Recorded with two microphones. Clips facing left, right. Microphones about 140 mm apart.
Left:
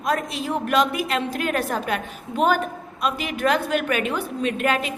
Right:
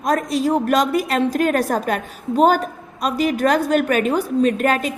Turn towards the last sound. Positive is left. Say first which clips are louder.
# right 5 dB
turn(degrees=-40)  # may be behind; listen again after turning